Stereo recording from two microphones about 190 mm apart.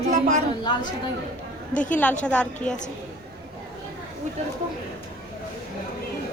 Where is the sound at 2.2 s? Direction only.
5° left (ahead or behind).